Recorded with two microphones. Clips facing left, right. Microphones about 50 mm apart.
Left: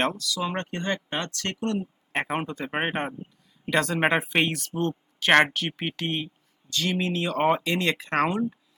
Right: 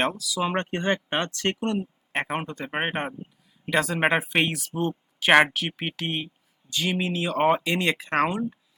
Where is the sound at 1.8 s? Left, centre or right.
Centre.